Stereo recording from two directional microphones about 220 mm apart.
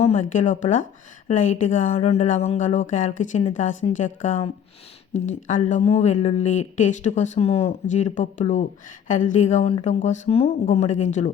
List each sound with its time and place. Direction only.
0.0 s speech: 30° left (ahead or behind)